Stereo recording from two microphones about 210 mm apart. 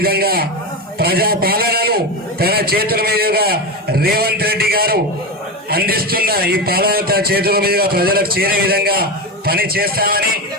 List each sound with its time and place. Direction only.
0.0 s a man's voice: 45° right (ahead or behind)